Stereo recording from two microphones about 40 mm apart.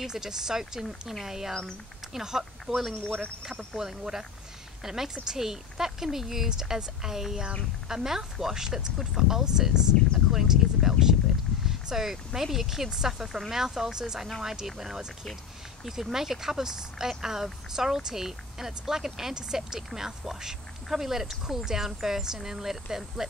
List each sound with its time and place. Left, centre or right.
0.0 s speech: centre
0.8 s speech: centre
1.2 s speech: centre
3.0 s speech: left
3.4 s speech: centre